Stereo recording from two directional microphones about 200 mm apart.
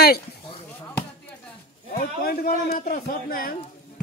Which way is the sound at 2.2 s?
45° left (ahead or behind).